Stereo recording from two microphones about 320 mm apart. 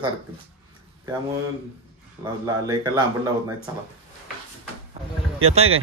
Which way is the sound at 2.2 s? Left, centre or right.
Centre.